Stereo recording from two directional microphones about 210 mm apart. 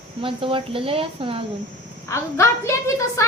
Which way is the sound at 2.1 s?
15° left (ahead or behind).